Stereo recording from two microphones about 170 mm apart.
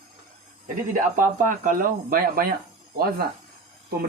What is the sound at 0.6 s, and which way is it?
Speech, 50° right (ahead or behind).